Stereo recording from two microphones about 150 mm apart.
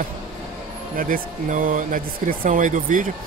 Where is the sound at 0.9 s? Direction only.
65° right (ahead or behind).